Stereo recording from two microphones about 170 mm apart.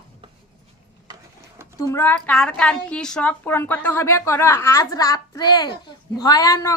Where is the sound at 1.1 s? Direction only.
25° right (ahead or behind).